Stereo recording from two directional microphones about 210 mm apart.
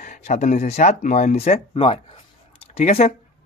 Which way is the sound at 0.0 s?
35° left (ahead or behind).